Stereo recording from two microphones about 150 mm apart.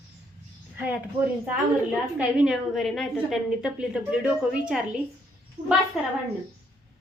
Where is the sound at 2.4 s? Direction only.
Centre (ahead or behind).